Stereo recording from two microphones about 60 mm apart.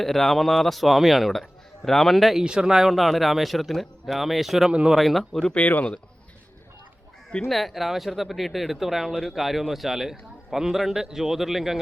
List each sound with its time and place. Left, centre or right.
0.0 s speech: centre
2.4 s speech: centre
5.5 s speech: left
7.4 s speech: centre